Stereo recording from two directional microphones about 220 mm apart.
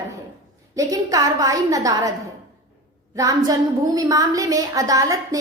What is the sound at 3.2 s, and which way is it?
A woman's voice, 15° right (ahead or behind).